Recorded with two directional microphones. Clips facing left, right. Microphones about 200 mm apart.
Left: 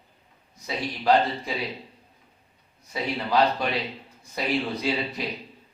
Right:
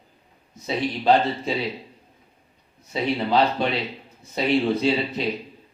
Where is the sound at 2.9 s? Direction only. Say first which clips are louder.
Right 3 dB; 25° right (ahead or behind).